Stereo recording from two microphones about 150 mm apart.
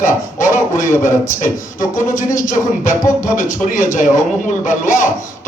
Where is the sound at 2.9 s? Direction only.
55° left (ahead or behind).